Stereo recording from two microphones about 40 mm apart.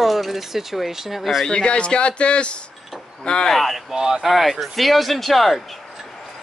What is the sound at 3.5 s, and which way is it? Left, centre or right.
Speech, centre.